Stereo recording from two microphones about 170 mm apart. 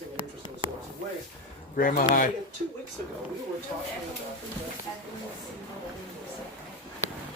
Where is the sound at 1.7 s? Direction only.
55° left (ahead or behind).